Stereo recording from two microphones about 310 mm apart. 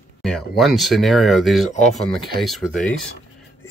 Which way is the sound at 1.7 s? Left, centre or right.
Left.